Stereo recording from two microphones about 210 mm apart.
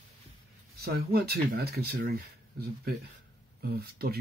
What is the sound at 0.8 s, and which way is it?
Speech, 50° right (ahead or behind).